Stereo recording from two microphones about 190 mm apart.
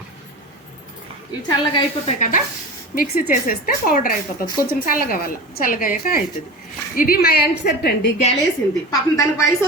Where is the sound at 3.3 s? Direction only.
50° left (ahead or behind).